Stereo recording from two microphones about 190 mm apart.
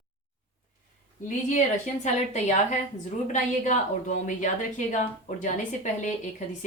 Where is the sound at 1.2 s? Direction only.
40° left (ahead or behind).